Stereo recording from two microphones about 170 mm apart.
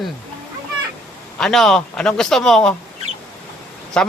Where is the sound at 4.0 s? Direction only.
5° left (ahead or behind).